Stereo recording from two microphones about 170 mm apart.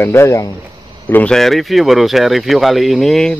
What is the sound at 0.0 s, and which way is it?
Speech, 15° left (ahead or behind).